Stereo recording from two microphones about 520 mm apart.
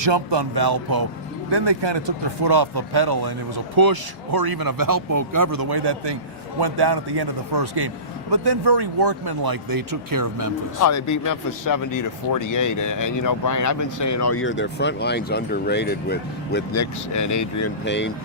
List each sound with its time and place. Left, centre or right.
0.0 s speech: right
10.8 s speech: left
16.7 s speech: left
17.8 s speech: centre